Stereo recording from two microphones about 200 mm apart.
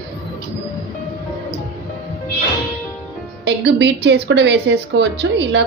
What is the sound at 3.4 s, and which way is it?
A woman's voice, 60° right (ahead or behind).